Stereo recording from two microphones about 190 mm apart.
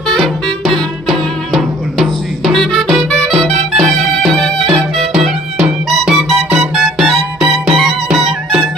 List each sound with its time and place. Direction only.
0.1 s music: centre (ahead or behind)
7.4 s music: 30° right (ahead or behind)
7.8 s music: centre (ahead or behind)